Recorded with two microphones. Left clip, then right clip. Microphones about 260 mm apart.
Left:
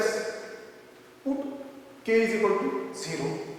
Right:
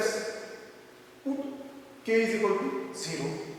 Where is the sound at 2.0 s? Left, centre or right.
Centre.